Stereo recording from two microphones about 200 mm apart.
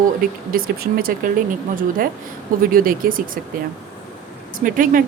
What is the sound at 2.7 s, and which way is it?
Speech, 45° right (ahead or behind).